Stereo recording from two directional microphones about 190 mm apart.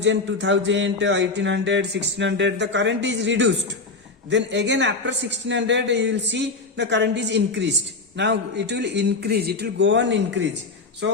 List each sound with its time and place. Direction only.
0.0 s a man's voice: 70° right (ahead or behind)